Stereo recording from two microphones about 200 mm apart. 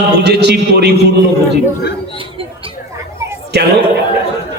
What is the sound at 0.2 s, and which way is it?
Speech, 55° right (ahead or behind).